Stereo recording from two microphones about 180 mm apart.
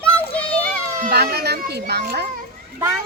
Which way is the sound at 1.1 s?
65° right (ahead or behind).